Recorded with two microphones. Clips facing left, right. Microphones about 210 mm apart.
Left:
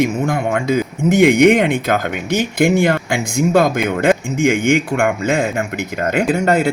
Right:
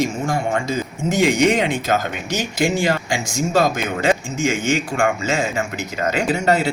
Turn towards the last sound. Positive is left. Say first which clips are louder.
# left 3 dB
turn(degrees=50)  # may be behind; listen again after turning